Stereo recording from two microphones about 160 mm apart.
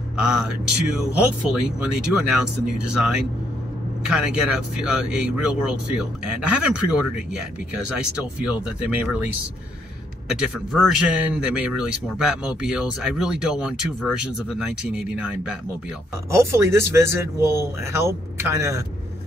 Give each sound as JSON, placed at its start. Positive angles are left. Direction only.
{"t": 0.2, "sound": "speech", "side_deg": -5}
{"t": 7.9, "sound": "speech", "side_deg": -5}
{"t": 16.3, "sound": "speech", "side_deg": -20}